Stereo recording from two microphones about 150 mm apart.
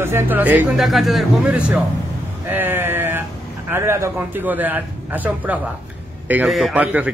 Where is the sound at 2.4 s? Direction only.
15° right (ahead or behind).